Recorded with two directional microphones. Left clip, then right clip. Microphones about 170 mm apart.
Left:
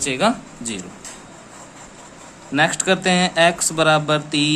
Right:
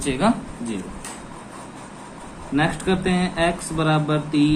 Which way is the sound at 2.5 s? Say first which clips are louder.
Left 4 dB; 80° left.